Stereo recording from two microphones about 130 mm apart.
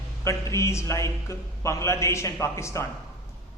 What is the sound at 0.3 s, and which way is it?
A man's voice, 25° left (ahead or behind).